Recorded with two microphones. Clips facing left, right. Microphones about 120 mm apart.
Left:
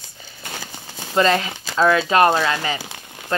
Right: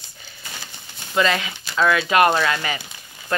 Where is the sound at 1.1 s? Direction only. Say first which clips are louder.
Left 3 dB; 35° left (ahead or behind).